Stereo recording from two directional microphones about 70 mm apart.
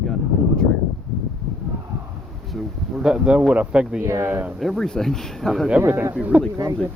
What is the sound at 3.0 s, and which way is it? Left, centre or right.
Speech, centre.